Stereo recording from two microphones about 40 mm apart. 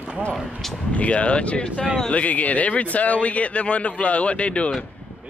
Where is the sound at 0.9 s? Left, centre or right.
Left.